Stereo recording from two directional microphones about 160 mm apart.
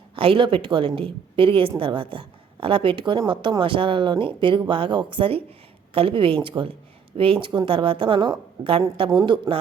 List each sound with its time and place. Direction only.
0.2 s a woman's voice: 35° right (ahead or behind)